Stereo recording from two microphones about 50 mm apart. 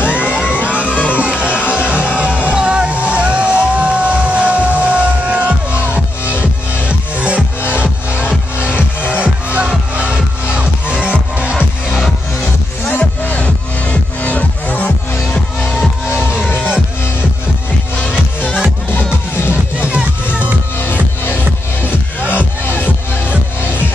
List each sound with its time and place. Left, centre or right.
0.0 s music: left
1.2 s music: right
6.9 s music: right
9.2 s music: right
12.8 s music: left
19.8 s music: right
20.8 s music: left